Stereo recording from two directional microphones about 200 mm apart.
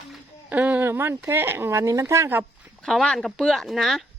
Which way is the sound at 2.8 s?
Centre (ahead or behind).